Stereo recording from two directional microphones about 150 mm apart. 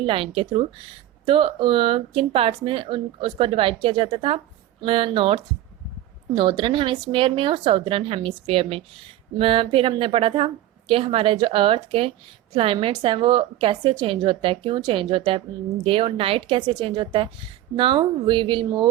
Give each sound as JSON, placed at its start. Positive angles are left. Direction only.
{"t": 0.0, "sound": "speech", "side_deg": -35}